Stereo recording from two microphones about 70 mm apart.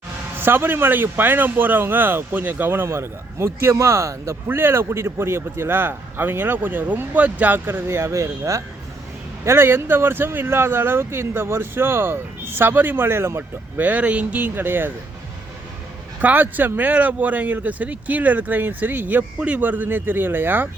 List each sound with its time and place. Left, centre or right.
0.3 s speech: right
13.8 s speech: right
16.2 s speech: right